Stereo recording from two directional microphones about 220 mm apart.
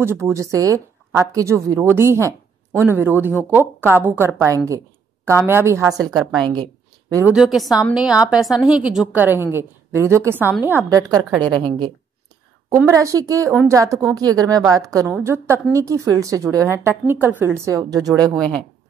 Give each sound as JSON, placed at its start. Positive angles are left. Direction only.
{"t": 0.0, "sound": "speech", "side_deg": -10}
{"t": 4.6, "sound": "a sound", "side_deg": -15}
{"t": 5.5, "sound": "a woman's voice", "side_deg": -10}
{"t": 7.3, "sound": "a woman's voice", "side_deg": 0}
{"t": 18.3, "sound": "a woman's voice", "side_deg": 5}